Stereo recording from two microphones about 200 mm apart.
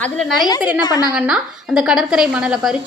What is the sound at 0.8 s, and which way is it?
Speech, 20° left (ahead or behind).